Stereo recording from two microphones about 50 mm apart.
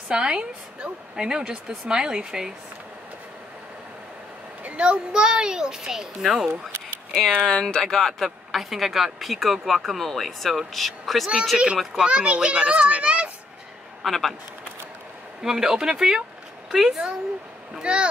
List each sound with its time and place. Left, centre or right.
0.1 s a woman's voice: centre
4.8 s a woman's voice: centre
7.4 s speech: centre
11.5 s a child's voice: right
14.0 s speech: centre
15.4 s a woman's voice: centre
17.7 s a child's voice: right